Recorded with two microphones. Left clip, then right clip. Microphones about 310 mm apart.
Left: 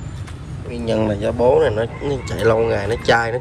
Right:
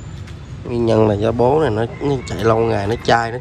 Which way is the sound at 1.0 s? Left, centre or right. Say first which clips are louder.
Right 3 dB; left.